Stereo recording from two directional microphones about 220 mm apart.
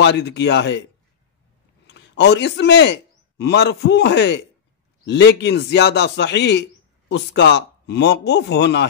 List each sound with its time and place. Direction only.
0.0 s speech: 50° left (ahead or behind)
1.9 s a man's voice: 55° left (ahead or behind)